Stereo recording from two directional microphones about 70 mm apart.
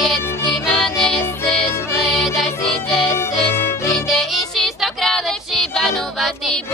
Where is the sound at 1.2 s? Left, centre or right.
Left.